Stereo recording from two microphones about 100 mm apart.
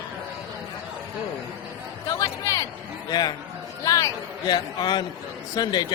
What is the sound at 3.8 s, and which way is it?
Speech, 35° left (ahead or behind).